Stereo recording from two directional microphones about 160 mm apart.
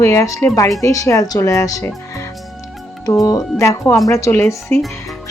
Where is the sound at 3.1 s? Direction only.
20° left (ahead or behind).